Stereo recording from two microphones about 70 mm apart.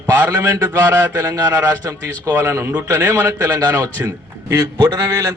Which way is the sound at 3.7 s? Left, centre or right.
Right.